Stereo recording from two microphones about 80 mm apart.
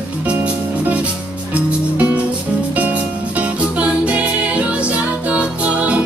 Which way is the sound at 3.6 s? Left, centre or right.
Centre.